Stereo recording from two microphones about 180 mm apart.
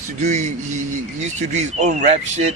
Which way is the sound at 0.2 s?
40° right (ahead or behind).